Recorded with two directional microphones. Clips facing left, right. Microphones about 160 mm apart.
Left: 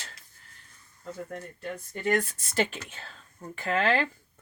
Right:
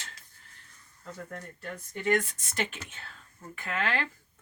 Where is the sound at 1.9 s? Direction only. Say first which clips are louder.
Even; 40° left (ahead or behind).